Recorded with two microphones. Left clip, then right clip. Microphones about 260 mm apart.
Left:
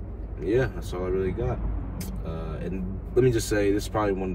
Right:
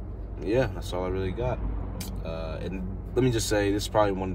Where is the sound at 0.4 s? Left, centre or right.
Centre.